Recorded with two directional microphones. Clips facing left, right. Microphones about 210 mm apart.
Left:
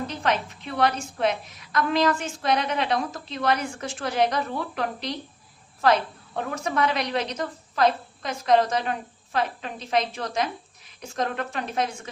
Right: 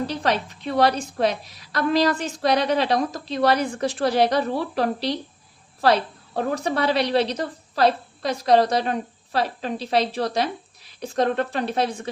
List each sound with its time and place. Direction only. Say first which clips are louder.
0.1 s a woman's voice: right 2 dB; 35° right (ahead or behind)